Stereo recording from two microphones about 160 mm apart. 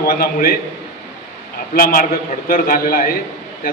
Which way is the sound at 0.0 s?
70° left (ahead or behind).